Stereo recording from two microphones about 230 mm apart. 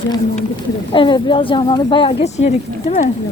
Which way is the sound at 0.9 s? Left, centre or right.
Left.